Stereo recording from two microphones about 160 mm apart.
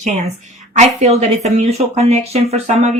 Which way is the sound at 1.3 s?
45° right (ahead or behind).